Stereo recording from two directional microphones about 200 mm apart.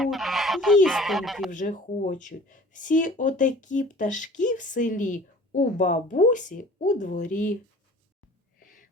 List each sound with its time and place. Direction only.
0.0 s goose: centre (ahead or behind)
0.9 s speech: centre (ahead or behind)
1.5 s speech: 40° left (ahead or behind)
8.5 s a sound: 45° left (ahead or behind)